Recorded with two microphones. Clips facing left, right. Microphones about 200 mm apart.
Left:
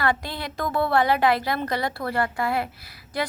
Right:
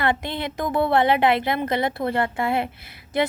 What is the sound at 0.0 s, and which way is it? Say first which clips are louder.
A woman's voice: right 2 dB; 20° right (ahead or behind).